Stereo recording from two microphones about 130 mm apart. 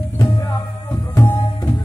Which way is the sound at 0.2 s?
25° left (ahead or behind).